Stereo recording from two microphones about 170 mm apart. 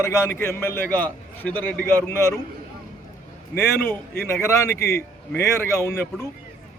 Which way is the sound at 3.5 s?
10° left (ahead or behind).